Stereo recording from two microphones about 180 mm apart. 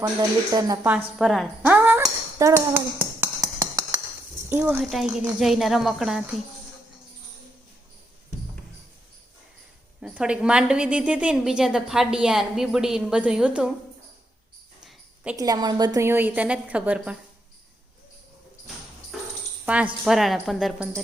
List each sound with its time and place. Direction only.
0.0 s speech: 20° right (ahead or behind)
1.2 s a woman's voice: centre (ahead or behind)
1.6 s a sound: 10° right (ahead or behind)
4.4 s speech: 10° right (ahead or behind)
4.8 s a woman's voice: centre (ahead or behind)
10.0 s a woman's voice: 5° right (ahead or behind)
14.8 s a sound: 5° right (ahead or behind)
15.4 s a woman's voice: 20° right (ahead or behind)
19.6 s a woman's voice: 5° right (ahead or behind)